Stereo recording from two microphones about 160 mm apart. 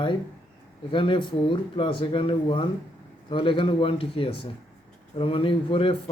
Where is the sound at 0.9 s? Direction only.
30° left (ahead or behind).